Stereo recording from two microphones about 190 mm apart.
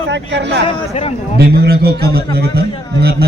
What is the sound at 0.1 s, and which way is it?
Speech, 65° right (ahead or behind).